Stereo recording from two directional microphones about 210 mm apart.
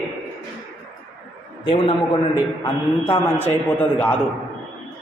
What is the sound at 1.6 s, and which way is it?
A man's voice, 25° left (ahead or behind).